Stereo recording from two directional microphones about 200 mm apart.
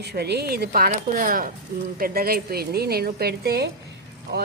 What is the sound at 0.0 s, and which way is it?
Speech, 55° right (ahead or behind).